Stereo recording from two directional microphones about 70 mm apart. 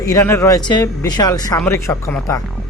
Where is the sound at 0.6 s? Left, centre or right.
Left.